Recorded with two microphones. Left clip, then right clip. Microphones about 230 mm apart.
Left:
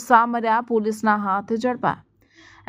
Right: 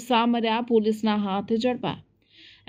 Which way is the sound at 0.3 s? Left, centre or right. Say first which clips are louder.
Left 3 dB; left.